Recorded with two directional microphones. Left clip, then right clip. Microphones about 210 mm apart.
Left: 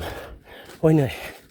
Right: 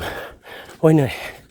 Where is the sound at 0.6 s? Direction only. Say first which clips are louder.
Right 4 dB; 25° right (ahead or behind).